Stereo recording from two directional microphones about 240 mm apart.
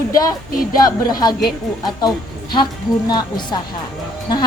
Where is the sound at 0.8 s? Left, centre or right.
Centre.